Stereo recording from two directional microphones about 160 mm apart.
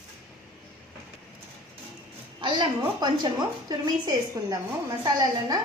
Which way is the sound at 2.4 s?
30° right (ahead or behind).